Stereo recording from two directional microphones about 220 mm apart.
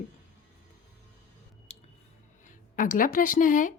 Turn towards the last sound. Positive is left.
turn(degrees=35)  # may be behind; listen again after turning